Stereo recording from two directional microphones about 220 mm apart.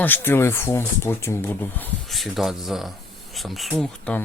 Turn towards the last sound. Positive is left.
turn(degrees=5)  # may be behind; listen again after turning